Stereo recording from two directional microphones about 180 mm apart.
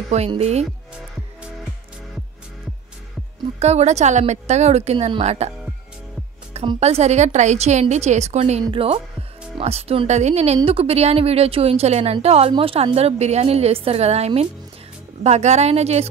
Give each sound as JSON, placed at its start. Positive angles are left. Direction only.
{"t": 0.3, "sound": "a woman's voice", "side_deg": -35}
{"t": 3.5, "sound": "a woman's voice", "side_deg": -35}
{"t": 6.5, "sound": "a woman's voice", "side_deg": -30}